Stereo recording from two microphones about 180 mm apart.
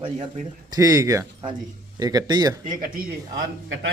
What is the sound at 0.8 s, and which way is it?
Speech, 20° right (ahead or behind).